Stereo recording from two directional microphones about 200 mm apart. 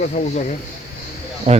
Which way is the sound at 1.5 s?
30° right (ahead or behind).